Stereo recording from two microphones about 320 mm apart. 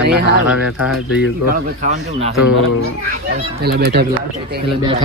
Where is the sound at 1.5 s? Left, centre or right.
Right.